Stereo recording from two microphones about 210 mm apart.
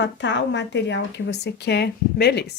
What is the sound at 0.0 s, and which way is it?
Speech, 60° left (ahead or behind).